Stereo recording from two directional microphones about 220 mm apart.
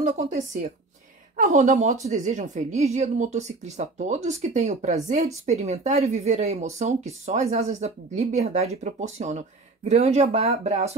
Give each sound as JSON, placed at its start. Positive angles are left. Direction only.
{"t": 0.0, "sound": "speech", "side_deg": -30}